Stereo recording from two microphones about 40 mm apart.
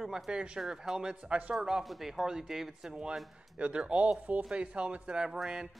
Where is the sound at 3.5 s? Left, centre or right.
Right.